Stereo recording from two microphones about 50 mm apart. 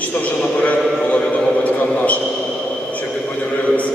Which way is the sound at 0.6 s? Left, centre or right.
Left.